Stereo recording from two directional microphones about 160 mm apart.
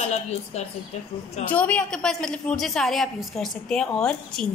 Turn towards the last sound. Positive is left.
turn(degrees=5)  # may be behind; listen again after turning